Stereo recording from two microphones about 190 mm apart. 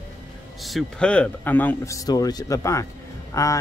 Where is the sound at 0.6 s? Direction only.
Centre (ahead or behind).